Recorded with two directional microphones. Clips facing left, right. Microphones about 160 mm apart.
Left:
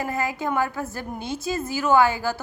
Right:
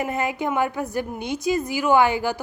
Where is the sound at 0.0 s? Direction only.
20° right (ahead or behind).